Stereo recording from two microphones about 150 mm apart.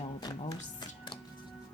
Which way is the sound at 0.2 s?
30° left (ahead or behind).